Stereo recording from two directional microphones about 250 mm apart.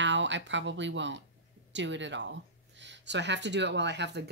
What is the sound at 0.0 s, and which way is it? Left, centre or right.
Speech, right.